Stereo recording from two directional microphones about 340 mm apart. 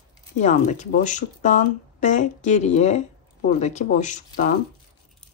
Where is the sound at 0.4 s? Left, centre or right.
Left.